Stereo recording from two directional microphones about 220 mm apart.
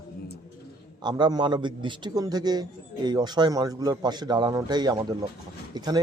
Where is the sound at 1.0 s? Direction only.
20° right (ahead or behind).